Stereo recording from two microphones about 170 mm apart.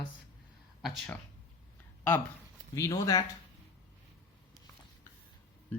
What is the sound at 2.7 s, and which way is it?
Speech, 20° left (ahead or behind).